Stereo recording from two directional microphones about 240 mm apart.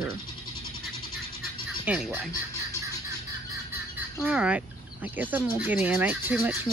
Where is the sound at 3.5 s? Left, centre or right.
Centre.